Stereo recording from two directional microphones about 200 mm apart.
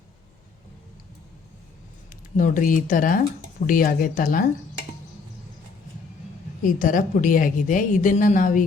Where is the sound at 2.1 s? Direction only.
40° left (ahead or behind).